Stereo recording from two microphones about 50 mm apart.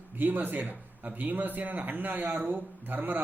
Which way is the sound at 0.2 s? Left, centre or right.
Right.